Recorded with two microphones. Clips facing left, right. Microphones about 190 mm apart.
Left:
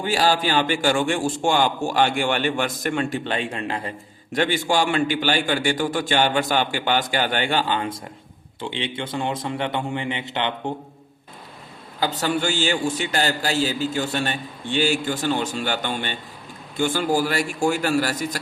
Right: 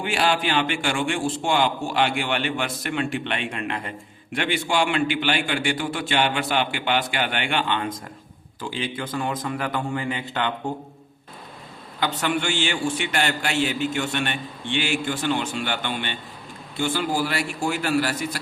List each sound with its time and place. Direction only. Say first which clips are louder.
0.0 s a man's voice: left 2 dB; 35° left (ahead or behind); by 10.5 s 20° left (ahead or behind)
11.9 s a man's voice: left 1 dB; 35° left (ahead or behind)